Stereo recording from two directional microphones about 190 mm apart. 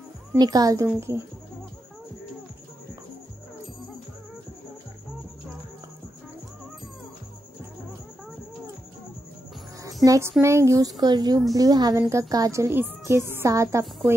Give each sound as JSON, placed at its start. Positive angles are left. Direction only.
{"t": 0.3, "sound": "speech", "side_deg": -20}
{"t": 10.0, "sound": "speech", "side_deg": -15}